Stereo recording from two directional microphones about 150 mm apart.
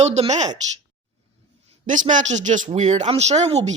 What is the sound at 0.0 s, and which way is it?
Speech, 50° right (ahead or behind).